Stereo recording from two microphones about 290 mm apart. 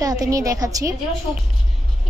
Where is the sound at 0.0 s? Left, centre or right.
Centre.